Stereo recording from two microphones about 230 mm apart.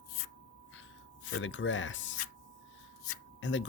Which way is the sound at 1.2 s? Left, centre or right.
Left.